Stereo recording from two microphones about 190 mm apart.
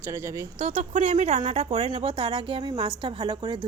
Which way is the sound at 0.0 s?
15° right (ahead or behind).